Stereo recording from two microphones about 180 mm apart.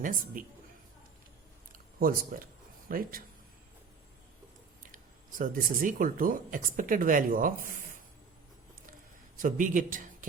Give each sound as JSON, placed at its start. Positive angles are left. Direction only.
{"t": 0.0, "sound": "speech", "side_deg": -50}
{"t": 1.7, "sound": "a sound", "side_deg": -50}
{"t": 2.9, "sound": "speech", "side_deg": -50}
{"t": 4.9, "sound": "speech", "side_deg": -50}
{"t": 9.4, "sound": "speech", "side_deg": -45}